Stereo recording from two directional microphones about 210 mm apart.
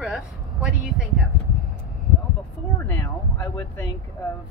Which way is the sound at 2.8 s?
10° left (ahead or behind).